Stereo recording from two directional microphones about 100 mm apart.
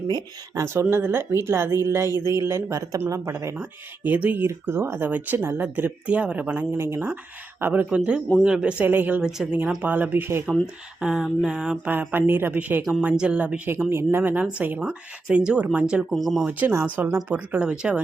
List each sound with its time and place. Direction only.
0.1 s speech: 45° right (ahead or behind)
0.6 s speech: 25° right (ahead or behind)
11.0 s a sound: 5° right (ahead or behind)
11.9 s speech: 20° right (ahead or behind); by 16.5 s centre (ahead or behind)
16.5 s speech: 15° right (ahead or behind)